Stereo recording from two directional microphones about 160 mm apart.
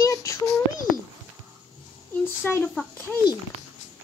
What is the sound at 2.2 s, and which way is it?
Speech, 15° left (ahead or behind).